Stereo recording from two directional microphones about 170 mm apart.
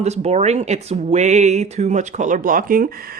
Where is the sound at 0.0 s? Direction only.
40° right (ahead or behind).